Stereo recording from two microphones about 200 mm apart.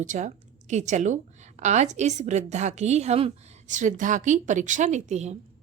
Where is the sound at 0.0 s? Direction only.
40° right (ahead or behind).